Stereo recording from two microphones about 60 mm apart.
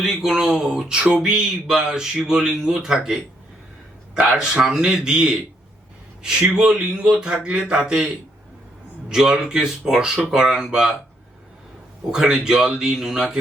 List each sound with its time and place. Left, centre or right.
0.0 s speech: centre
4.4 s speech: centre
6.5 s speech: centre
12.1 s speech: centre